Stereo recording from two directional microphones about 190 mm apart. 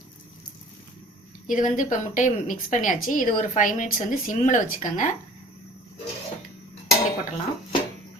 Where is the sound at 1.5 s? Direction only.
45° left (ahead or behind).